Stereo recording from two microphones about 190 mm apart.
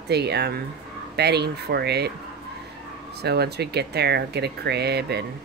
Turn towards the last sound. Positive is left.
turn(degrees=-60)  # may be behind; listen again after turning